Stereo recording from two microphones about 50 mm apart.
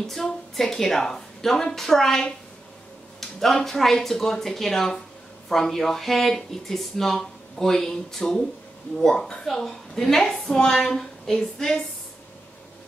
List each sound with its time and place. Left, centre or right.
0.0 s speech: centre